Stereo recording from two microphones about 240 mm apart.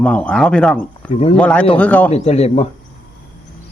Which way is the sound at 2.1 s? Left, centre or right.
Left.